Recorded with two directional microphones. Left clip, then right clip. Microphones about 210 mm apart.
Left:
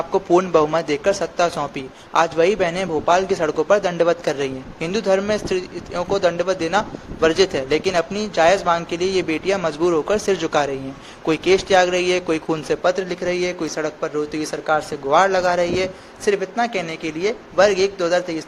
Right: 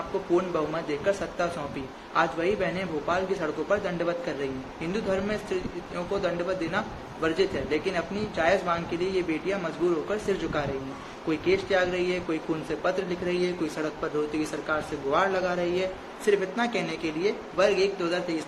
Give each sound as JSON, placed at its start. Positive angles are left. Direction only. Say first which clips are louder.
{"t": 0.3, "sound": "speech", "louder": "left 11 dB", "side_deg": 45}